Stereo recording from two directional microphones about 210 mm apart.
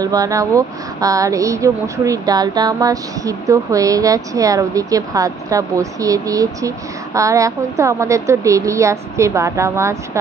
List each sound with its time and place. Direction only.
0.0 s speech: 15° right (ahead or behind)